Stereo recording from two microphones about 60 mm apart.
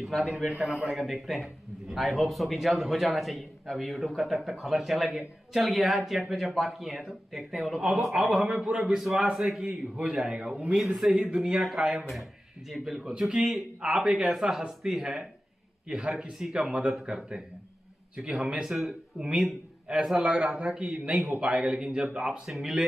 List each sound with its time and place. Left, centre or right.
0.0 s a man's voice: centre
0.6 s speech: centre
0.9 s a man's voice: centre
8.5 s a man's voice: centre
8.9 s a man's voice: centre
11.0 s a man's voice: centre